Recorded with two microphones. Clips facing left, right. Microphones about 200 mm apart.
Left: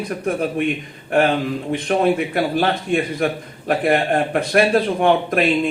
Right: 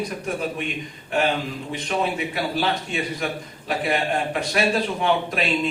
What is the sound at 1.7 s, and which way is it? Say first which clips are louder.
A man's voice: left 8 dB; 55° left (ahead or behind).